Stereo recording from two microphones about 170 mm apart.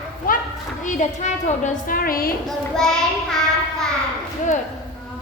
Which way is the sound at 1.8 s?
55° left (ahead or behind).